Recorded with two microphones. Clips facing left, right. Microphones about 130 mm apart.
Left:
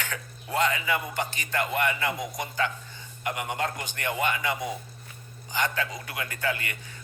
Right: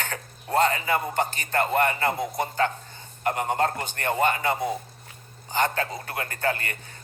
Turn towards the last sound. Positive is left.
turn(degrees=-45)  # may be behind; listen again after turning